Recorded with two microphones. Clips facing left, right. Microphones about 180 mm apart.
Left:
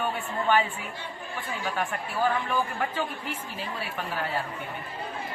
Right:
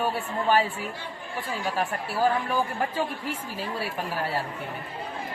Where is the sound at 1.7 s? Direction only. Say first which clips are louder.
Right 2 dB; 35° right (ahead or behind).